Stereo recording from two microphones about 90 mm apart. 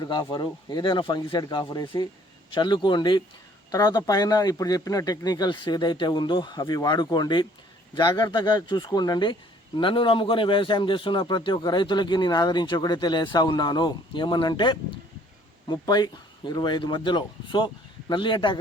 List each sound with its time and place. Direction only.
0.0 s a man's voice: 50° left (ahead or behind)
1.4 s a man's voice: 50° left (ahead or behind)
9.7 s a man's voice: 70° left (ahead or behind)